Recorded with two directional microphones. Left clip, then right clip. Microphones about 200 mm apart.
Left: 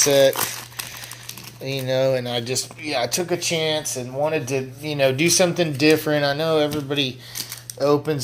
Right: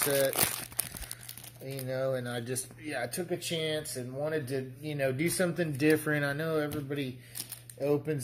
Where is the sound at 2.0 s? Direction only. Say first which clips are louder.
Left 12 dB; 15° left (ahead or behind).